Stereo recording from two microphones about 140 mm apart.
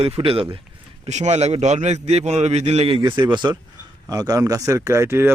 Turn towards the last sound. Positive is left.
turn(degrees=-20)  # may be behind; listen again after turning